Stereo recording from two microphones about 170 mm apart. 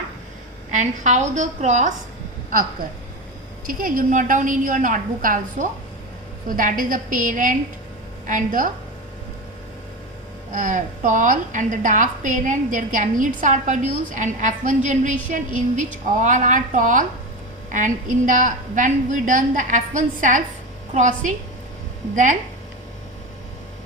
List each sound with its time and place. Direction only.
0.7 s a woman's voice: 45° right (ahead or behind)
3.7 s a woman's voice: 55° right (ahead or behind)
10.5 s a woman's voice: 50° right (ahead or behind)